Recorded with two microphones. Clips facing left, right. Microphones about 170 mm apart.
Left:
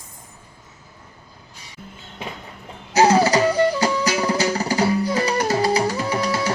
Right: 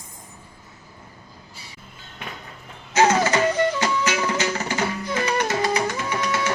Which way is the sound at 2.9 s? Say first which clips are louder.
Left 3 dB; 35° left (ahead or behind).